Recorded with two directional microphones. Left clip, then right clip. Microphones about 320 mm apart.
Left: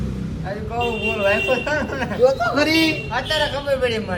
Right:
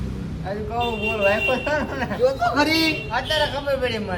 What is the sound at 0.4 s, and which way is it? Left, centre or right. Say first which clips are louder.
Speech: left 1 dB; right.